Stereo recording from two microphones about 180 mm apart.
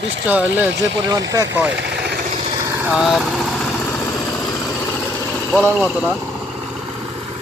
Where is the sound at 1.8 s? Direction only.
65° right (ahead or behind).